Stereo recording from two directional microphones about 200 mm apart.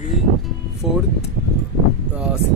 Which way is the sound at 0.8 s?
Centre (ahead or behind).